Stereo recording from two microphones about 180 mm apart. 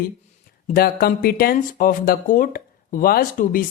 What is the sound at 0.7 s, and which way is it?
Speech, 55° left (ahead or behind).